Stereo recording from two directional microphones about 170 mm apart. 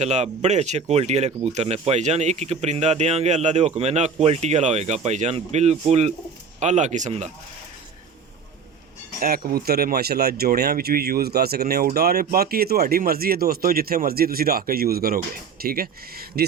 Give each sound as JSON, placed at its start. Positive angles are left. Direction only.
{"t": 0.0, "sound": "speech", "side_deg": -40}
{"t": 9.2, "sound": "speech", "side_deg": -65}